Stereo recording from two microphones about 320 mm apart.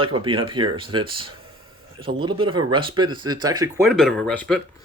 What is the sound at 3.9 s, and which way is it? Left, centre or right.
Speech, centre.